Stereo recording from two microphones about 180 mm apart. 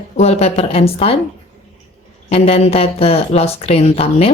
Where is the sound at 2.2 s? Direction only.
35° left (ahead or behind).